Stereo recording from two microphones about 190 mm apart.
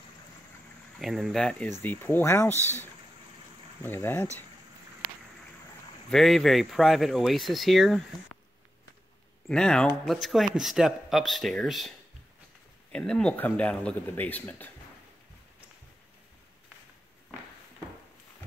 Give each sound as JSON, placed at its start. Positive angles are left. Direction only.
{"t": 0.9, "sound": "speech", "side_deg": 0}
{"t": 3.8, "sound": "speech", "side_deg": 10}
{"t": 6.0, "sound": "speech", "side_deg": 0}
{"t": 9.5, "sound": "speech", "side_deg": 5}
{"t": 12.9, "sound": "speech", "side_deg": 5}